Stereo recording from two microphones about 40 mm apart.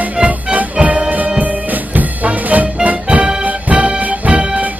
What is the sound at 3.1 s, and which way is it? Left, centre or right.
Music, right.